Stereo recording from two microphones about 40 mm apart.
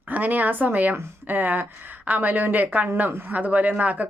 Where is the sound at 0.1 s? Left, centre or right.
Right.